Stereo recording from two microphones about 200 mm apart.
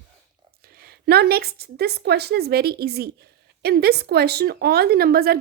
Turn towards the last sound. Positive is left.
turn(degrees=-50)  # may be behind; listen again after turning